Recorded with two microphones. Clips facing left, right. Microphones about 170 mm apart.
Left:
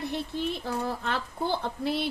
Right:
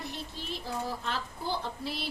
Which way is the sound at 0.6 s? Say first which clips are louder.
Left 4 dB; 60° left (ahead or behind).